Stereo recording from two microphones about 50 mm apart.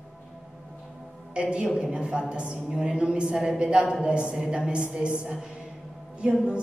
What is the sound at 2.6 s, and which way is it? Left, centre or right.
A woman's voice, centre.